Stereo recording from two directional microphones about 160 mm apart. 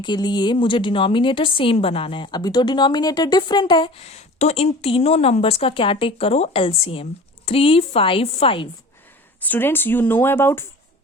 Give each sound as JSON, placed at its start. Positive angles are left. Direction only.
{"t": 0.0, "sound": "speech", "side_deg": 25}
{"t": 9.4, "sound": "speech", "side_deg": 10}